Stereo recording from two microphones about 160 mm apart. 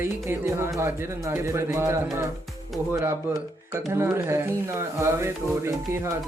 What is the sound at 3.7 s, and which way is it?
Speech, 15° right (ahead or behind).